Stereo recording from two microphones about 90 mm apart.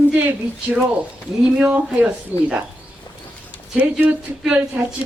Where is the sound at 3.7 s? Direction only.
15° right (ahead or behind).